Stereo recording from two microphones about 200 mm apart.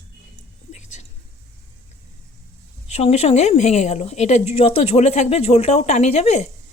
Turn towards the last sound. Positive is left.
turn(degrees=35)  # may be behind; listen again after turning